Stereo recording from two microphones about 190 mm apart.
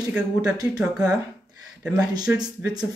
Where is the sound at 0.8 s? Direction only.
5° right (ahead or behind).